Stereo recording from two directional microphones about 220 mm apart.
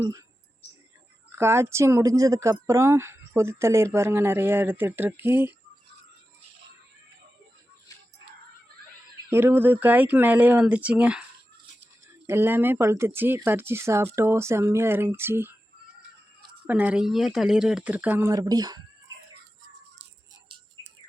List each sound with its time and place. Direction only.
0.0 s speech: 15° right (ahead or behind)
1.3 s speech: 10° right (ahead or behind)
9.1 s speech: 10° right (ahead or behind)
12.2 s speech: 10° right (ahead or behind)
16.6 s speech: 5° right (ahead or behind)